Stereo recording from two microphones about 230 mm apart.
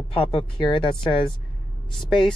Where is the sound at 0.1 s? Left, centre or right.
Left.